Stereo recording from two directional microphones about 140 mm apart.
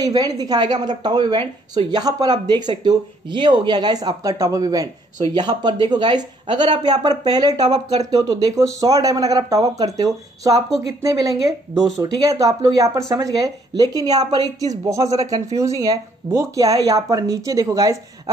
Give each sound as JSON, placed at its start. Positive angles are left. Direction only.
{"t": 0.0, "sound": "speech", "side_deg": -25}